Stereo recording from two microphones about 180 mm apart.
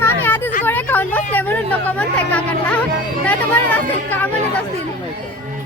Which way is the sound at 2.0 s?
10° left (ahead or behind).